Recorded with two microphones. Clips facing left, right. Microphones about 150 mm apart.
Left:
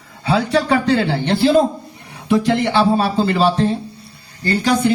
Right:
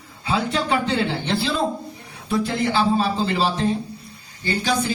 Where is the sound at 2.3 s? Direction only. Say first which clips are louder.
Left 6 dB; 80° left.